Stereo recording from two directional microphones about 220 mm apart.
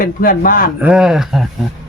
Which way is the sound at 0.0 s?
40° left (ahead or behind).